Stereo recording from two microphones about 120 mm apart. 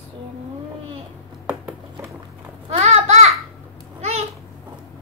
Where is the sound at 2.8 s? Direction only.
70° right (ahead or behind).